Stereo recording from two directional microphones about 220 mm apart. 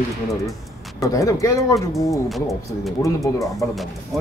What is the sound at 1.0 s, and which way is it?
Speech, 15° left (ahead or behind).